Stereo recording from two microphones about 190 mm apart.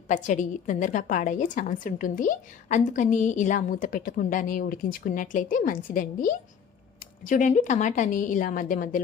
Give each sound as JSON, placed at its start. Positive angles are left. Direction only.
{"t": 0.1, "sound": "a woman's voice", "side_deg": 40}